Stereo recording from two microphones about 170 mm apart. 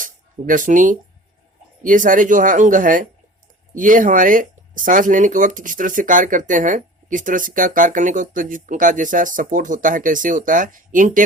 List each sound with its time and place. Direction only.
0.0 s music: 50° right (ahead or behind)
1.8 s speech: 50° right (ahead or behind)